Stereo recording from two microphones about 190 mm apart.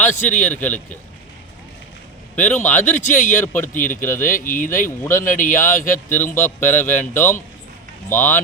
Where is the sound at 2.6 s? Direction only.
10° left (ahead or behind).